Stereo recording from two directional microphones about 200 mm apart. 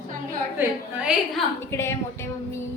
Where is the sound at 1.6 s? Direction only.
15° left (ahead or behind).